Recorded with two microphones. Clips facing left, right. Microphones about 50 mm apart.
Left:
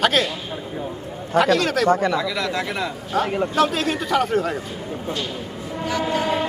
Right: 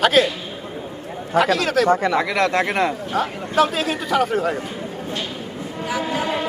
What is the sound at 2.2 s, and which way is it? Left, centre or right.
Speech, right.